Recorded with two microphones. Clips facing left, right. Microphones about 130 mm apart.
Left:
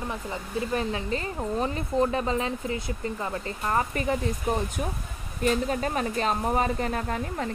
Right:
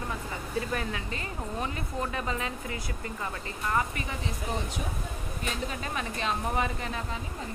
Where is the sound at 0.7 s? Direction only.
30° left (ahead or behind).